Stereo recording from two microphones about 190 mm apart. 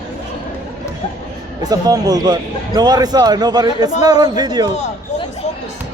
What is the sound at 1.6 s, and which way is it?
A man's voice, 20° right (ahead or behind).